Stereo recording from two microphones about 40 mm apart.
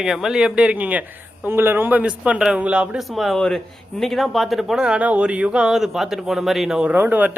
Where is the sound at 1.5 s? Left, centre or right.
Right.